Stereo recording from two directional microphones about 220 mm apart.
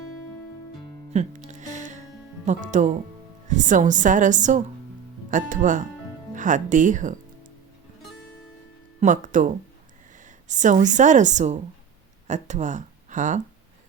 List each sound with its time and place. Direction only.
1.1 s music: 30° right (ahead or behind)
2.4 s a woman's voice: 35° right (ahead or behind)
9.0 s a woman's voice: 35° right (ahead or behind)
10.5 s a woman's voice: 35° right (ahead or behind)